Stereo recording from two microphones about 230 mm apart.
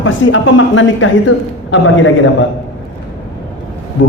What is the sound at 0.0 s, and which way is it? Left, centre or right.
Speech, left.